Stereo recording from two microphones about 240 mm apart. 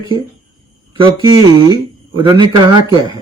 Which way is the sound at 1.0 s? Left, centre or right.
Centre.